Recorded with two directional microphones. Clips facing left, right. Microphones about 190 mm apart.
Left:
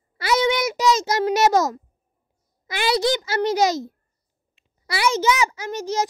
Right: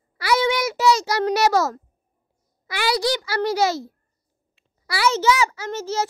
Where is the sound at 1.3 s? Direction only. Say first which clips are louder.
Left 1 dB; 20° left (ahead or behind).